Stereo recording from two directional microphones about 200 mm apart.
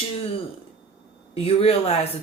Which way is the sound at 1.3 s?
30° left (ahead or behind).